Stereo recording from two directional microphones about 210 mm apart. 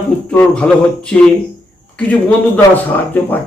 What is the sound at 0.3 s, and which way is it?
Speech, 5° left (ahead or behind).